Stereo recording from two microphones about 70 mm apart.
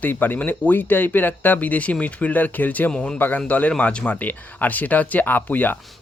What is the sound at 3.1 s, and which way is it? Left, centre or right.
Speech, left.